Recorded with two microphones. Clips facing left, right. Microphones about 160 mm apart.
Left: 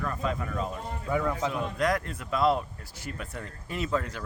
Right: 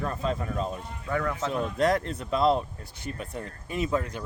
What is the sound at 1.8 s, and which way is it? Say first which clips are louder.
Speech: right 4 dB; 30° right (ahead or behind).